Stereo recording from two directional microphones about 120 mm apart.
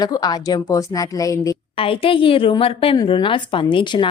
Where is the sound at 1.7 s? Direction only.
50° left (ahead or behind).